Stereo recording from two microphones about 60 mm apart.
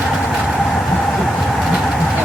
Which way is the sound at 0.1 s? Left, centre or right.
Centre.